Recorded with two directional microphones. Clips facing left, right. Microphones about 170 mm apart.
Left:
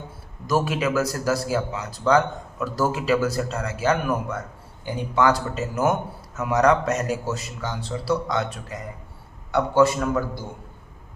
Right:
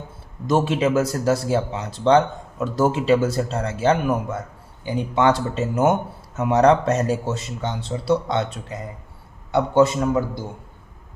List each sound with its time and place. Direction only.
0.4 s a man's voice: 25° right (ahead or behind)